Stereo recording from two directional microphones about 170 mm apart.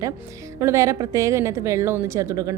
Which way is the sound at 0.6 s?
15° right (ahead or behind).